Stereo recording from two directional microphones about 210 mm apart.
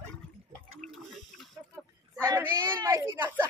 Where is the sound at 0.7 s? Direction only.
Centre (ahead or behind).